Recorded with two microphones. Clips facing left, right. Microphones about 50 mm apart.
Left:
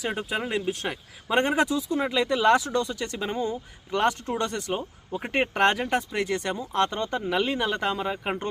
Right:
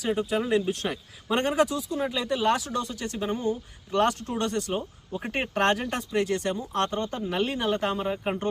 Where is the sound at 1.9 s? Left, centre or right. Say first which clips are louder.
Left 3 dB; left.